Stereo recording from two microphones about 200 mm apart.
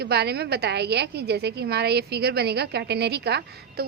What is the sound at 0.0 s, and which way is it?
A woman's voice, 55° right (ahead or behind).